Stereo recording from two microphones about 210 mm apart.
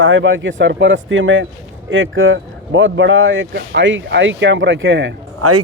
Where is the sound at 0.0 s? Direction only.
65° right (ahead or behind).